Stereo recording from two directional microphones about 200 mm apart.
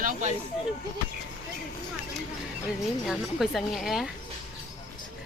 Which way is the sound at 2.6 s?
Centre (ahead or behind).